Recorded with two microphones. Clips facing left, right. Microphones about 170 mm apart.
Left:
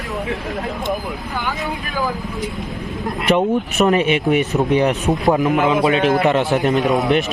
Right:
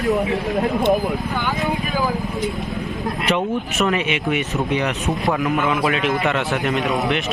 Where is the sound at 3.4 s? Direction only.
40° left (ahead or behind).